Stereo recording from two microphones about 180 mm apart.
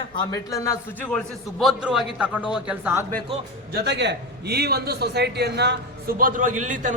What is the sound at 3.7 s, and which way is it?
A man's voice, 75° right (ahead or behind).